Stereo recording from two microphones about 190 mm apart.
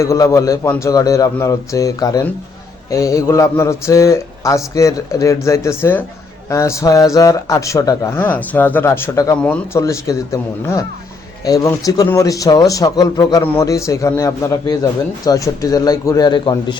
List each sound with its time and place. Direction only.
0.0 s a man's voice: 15° left (ahead or behind)